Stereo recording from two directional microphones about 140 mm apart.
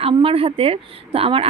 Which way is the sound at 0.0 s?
40° right (ahead or behind).